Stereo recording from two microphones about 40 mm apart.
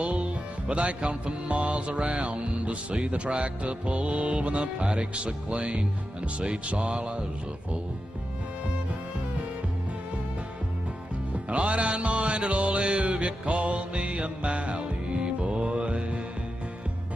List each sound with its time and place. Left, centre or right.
0.0 s music: right
11.5 s music: right